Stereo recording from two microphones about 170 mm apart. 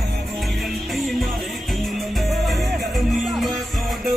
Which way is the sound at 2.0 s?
Centre (ahead or behind).